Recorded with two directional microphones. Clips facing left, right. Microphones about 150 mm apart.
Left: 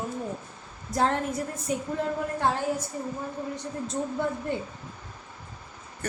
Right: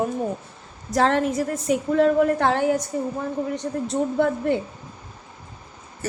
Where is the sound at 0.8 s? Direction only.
90° right.